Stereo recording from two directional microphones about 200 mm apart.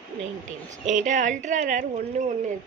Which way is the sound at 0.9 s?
40° right (ahead or behind).